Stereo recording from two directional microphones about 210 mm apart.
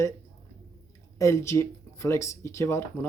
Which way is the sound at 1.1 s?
15° left (ahead or behind).